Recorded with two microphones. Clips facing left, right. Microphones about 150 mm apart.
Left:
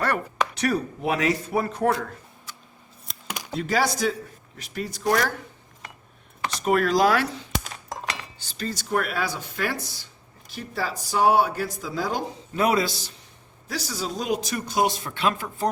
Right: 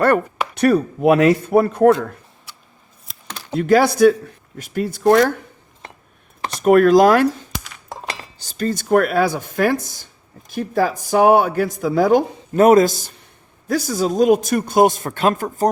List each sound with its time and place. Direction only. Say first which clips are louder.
0.5 s speech: right 13 dB; 55° right (ahead or behind)
3.2 s computer keyboard: left 1 dB; 10° left (ahead or behind)
3.5 s speech: right 10 dB; 55° right (ahead or behind)
4.5 s speech: right 9 dB; 50° right (ahead or behind)
6.6 s speech: right 9 dB; 55° right (ahead or behind)